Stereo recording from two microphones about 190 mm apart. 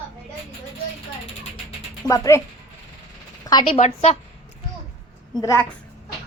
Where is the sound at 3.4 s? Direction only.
20° left (ahead or behind).